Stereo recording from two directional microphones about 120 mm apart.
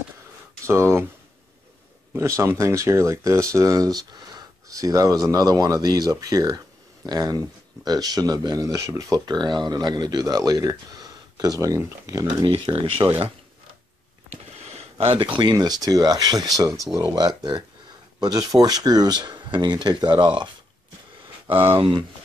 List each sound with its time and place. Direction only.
0.7 s speech: 20° right (ahead or behind)
2.1 s speech: 25° right (ahead or behind)
12.4 s speech: 45° right (ahead or behind)
14.3 s speech: 60° right (ahead or behind); by 20.4 s 40° right (ahead or behind)
21.5 s speech: 15° right (ahead or behind)